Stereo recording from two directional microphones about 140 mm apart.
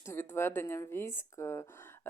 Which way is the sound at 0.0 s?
15° left (ahead or behind).